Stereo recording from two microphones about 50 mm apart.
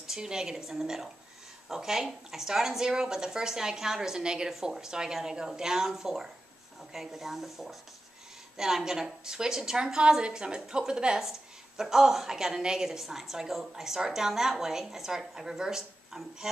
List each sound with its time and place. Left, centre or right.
0.0 s a woman's voice: centre